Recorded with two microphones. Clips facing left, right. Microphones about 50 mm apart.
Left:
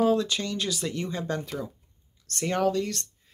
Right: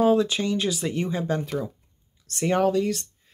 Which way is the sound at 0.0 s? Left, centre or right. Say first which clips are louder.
Right 4 dB; centre.